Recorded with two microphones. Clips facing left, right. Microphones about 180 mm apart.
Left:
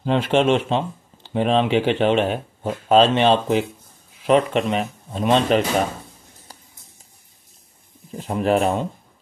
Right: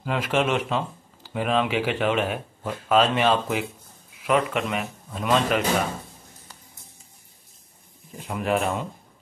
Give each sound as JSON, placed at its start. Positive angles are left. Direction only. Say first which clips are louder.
{"t": 0.0, "sound": "speech", "louder": "left 6 dB", "side_deg": 30}
{"t": 8.2, "sound": "speech", "louder": "left 6 dB", "side_deg": 30}